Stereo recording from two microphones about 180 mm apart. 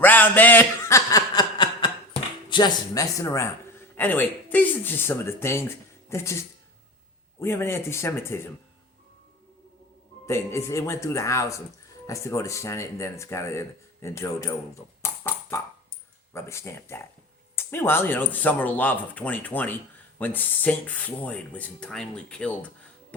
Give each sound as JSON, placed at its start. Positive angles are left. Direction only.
{"t": 0.0, "sound": "chuckle", "side_deg": 10}
{"t": 2.5, "sound": "a man's voice", "side_deg": 25}
{"t": 10.2, "sound": "a man's voice", "side_deg": 15}
{"t": 15.0, "sound": "a sound", "side_deg": 15}
{"t": 16.3, "sound": "a man's voice", "side_deg": 15}